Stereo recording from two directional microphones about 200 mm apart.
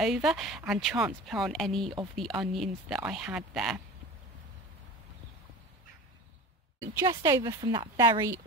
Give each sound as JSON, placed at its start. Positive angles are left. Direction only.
{"t": 0.0, "sound": "speech", "side_deg": 0}
{"t": 7.1, "sound": "a woman's voice", "side_deg": -20}